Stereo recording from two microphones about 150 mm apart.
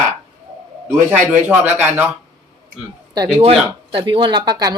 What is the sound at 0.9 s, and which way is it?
Speech, 10° right (ahead or behind).